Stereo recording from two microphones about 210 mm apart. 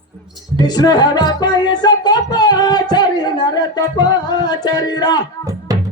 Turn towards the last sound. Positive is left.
turn(degrees=-15)  # may be behind; listen again after turning